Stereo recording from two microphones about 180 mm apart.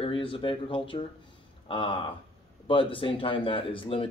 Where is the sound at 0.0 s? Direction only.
30° left (ahead or behind).